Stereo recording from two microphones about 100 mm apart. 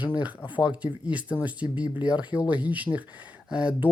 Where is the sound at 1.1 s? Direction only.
15° right (ahead or behind).